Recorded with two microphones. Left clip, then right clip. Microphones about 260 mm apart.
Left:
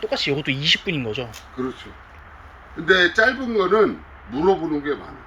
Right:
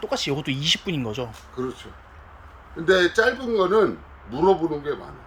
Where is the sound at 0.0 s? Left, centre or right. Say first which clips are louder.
Left 3 dB; centre.